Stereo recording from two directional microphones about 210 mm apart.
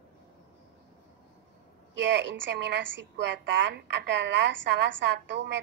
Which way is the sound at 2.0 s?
55° right (ahead or behind).